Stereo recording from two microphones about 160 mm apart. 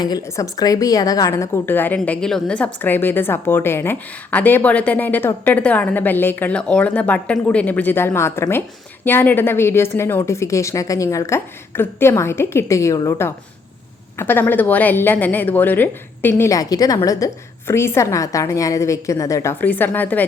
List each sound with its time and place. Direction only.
0.0 s a woman's voice: 20° left (ahead or behind)